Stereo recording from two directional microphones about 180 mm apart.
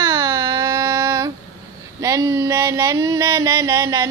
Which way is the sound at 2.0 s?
15° right (ahead or behind).